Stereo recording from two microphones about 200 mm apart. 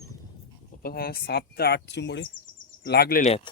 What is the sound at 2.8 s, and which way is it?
Speech, 50° left (ahead or behind).